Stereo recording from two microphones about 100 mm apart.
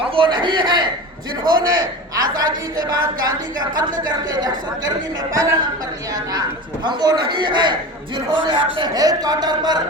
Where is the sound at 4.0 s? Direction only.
45° right (ahead or behind).